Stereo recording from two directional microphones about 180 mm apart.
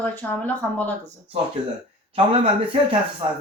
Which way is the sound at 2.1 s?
30° right (ahead or behind).